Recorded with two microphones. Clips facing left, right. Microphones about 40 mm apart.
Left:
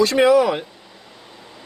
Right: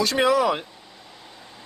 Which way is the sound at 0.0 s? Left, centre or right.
Centre.